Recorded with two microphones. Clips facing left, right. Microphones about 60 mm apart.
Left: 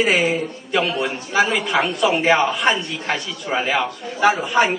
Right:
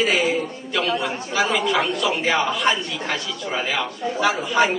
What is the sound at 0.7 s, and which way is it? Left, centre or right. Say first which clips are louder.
A man's voice: left 2 dB; left.